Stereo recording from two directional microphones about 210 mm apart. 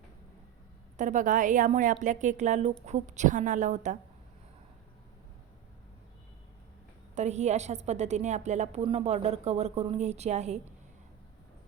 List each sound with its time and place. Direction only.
0.9 s a woman's voice: 35° right (ahead or behind)
7.2 s a woman's voice: 30° right (ahead or behind)